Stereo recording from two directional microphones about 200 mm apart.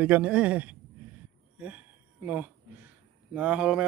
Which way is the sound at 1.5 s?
5° right (ahead or behind).